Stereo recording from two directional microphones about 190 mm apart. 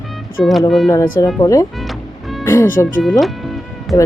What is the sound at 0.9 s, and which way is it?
Speech, 15° left (ahead or behind).